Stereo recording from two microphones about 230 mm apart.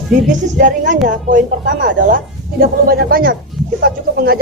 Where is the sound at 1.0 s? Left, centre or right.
Right.